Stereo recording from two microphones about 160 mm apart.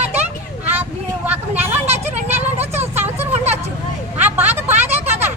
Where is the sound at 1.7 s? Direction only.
45° right (ahead or behind).